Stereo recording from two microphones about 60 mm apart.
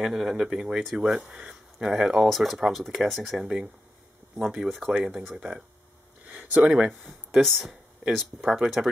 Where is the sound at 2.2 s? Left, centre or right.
Centre.